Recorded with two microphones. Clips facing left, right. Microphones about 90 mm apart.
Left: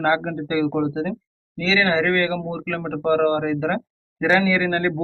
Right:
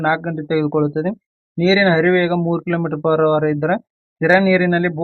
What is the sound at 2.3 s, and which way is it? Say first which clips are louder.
Speech: right 9 dB; 35° right (ahead or behind).